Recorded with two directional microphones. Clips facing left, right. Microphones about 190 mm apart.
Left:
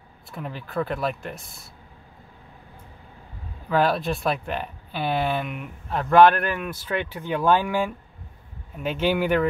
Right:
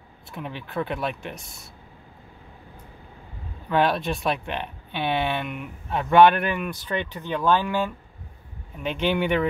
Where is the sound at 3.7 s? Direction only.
Centre (ahead or behind).